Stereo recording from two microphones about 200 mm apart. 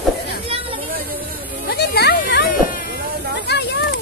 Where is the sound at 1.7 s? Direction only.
55° left (ahead or behind).